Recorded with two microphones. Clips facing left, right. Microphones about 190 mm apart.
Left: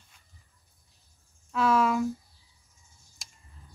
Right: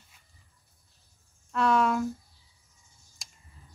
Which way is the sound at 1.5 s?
Centre (ahead or behind).